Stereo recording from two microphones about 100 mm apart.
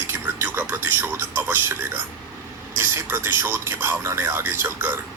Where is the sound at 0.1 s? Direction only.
20° right (ahead or behind).